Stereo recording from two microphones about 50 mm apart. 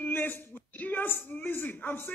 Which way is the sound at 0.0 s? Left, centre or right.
Left.